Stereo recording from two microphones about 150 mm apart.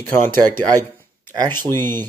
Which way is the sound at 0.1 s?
15° left (ahead or behind).